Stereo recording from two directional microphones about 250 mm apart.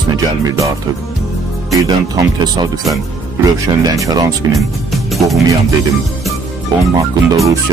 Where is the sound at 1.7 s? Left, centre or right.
Centre.